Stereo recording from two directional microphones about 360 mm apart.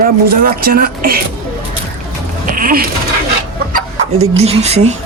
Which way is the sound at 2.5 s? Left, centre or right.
Right.